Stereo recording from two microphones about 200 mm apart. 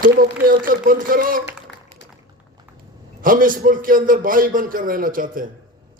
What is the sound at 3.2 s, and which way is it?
A man's voice, 45° right (ahead or behind).